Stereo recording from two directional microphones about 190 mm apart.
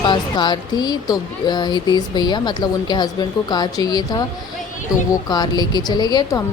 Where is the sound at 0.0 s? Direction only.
25° left (ahead or behind).